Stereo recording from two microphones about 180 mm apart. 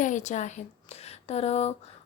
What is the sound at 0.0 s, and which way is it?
A woman's voice, 45° left (ahead or behind).